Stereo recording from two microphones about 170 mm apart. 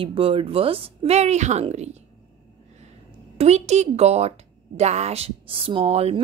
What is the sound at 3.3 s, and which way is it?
Speech, 40° right (ahead or behind).